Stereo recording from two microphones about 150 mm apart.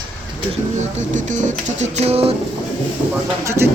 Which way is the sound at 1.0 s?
55° right (ahead or behind).